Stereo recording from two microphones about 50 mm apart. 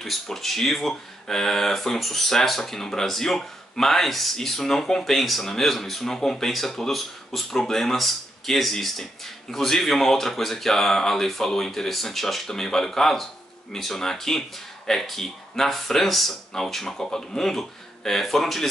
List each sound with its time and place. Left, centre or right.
0.0 s speech: centre